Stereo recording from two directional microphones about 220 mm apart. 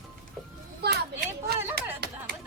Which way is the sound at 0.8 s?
50° right (ahead or behind).